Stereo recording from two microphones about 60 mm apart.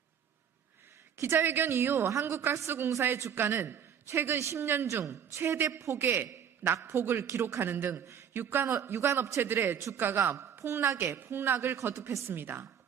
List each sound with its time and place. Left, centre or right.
1.1 s a man's voice: right